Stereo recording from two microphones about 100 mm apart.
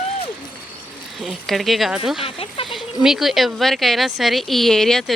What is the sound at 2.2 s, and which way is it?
Speech, 65° left (ahead or behind).